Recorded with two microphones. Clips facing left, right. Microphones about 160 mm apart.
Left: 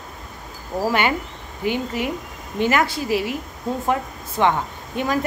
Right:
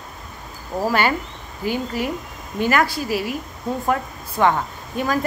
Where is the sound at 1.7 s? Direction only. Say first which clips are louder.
Even; 20° left (ahead or behind).